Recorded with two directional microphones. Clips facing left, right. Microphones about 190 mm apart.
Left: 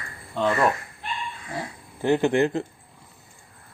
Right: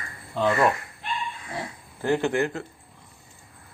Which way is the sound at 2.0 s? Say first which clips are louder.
Left 3 dB; 20° left (ahead or behind).